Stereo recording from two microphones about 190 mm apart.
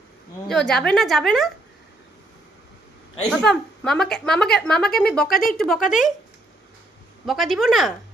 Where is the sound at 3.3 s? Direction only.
5° left (ahead or behind).